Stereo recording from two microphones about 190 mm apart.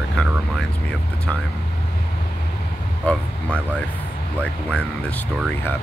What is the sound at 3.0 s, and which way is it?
Speech, 5° left (ahead or behind).